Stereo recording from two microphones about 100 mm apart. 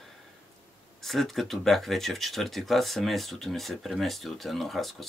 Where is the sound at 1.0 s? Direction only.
Centre (ahead or behind).